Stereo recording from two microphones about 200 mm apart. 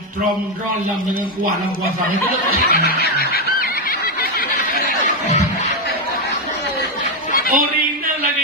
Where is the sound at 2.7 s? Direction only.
50° left (ahead or behind).